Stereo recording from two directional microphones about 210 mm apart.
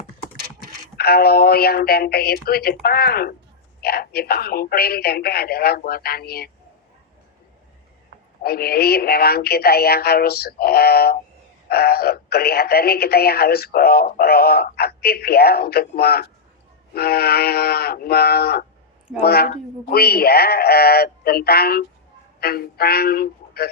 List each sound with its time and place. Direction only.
0.9 s speech: 50° left (ahead or behind)
8.4 s speech: 45° left (ahead or behind)